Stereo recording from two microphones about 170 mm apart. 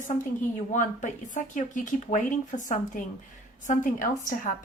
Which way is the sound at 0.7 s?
45° left (ahead or behind).